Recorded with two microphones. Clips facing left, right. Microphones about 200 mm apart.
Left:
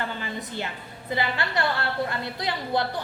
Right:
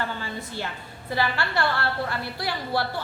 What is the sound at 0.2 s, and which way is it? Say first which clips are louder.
A woman's voice: left 1 dB; 20° left (ahead or behind).